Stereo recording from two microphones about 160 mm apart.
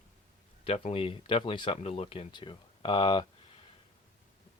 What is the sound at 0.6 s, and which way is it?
Speech, 40° left (ahead or behind).